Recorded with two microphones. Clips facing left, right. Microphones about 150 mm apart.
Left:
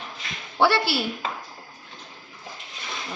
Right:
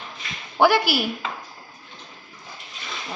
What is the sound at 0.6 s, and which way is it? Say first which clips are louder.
Speech: right 3 dB; 15° right (ahead or behind).